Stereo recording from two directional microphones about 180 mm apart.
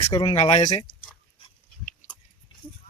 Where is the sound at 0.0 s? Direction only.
25° left (ahead or behind).